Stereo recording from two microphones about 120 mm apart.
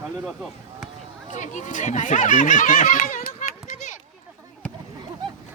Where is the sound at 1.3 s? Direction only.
90° left.